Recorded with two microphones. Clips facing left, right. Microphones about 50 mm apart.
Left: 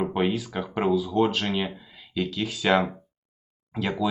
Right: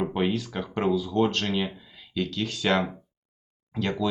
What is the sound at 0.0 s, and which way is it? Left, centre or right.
Speech, centre.